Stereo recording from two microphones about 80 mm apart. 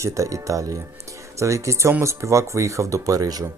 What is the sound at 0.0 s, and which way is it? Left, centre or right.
Speech, right.